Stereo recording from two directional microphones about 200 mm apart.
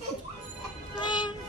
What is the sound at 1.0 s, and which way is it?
Music, 20° left (ahead or behind).